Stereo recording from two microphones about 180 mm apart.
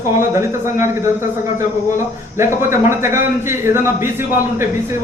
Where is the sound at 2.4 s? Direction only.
15° right (ahead or behind).